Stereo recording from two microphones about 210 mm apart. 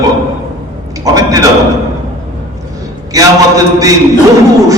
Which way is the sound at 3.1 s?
15° right (ahead or behind).